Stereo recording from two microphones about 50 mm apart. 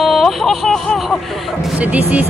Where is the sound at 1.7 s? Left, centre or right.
Right.